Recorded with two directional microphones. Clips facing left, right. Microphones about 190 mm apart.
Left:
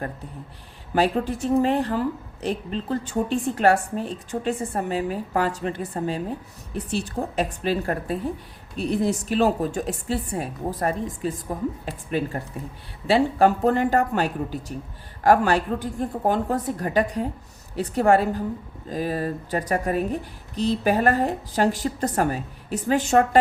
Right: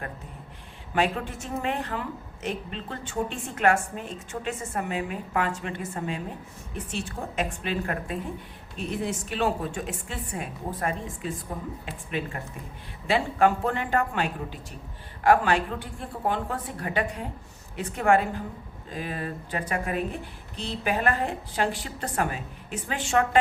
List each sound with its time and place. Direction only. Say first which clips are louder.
0.9 s speech: left 5 dB; 35° left (ahead or behind)